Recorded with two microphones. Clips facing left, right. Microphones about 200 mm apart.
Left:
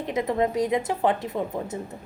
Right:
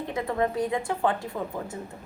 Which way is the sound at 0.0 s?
20° left (ahead or behind).